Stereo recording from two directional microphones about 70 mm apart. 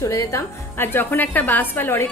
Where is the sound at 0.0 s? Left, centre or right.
Left.